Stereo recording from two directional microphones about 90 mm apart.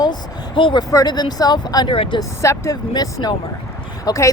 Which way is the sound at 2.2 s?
35° left (ahead or behind).